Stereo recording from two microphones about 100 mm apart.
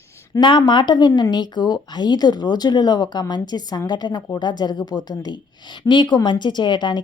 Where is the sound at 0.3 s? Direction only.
50° left (ahead or behind).